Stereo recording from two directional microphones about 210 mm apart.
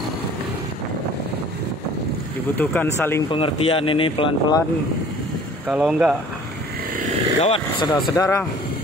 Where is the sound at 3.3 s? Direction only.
25° left (ahead or behind).